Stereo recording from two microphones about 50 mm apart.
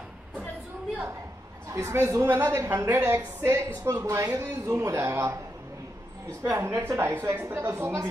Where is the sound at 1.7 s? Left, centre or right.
Right.